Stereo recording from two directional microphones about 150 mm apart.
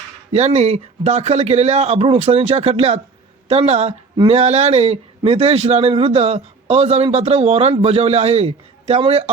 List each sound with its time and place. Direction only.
0.3 s a man's voice: 45° right (ahead or behind)